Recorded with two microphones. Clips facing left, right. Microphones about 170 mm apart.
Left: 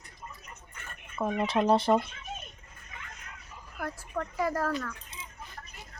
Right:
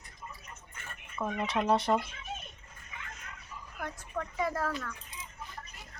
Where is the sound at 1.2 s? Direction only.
30° left (ahead or behind).